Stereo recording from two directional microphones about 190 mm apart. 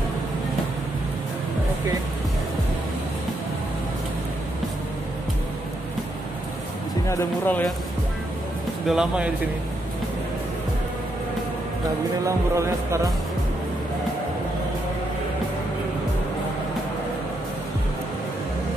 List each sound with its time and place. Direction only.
7.1 s speech: 10° left (ahead or behind)
8.8 s speech: 5° right (ahead or behind)
12.3 s music: 15° right (ahead or behind)